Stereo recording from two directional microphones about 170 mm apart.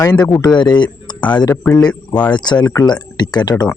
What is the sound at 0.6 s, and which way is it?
Speech, 25° left (ahead or behind).